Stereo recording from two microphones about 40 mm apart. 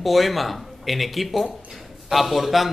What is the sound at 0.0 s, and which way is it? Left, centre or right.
Speech, centre.